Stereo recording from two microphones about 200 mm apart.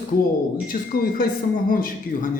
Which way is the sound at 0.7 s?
35° left (ahead or behind).